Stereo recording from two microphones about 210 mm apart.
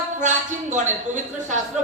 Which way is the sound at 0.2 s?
35° right (ahead or behind).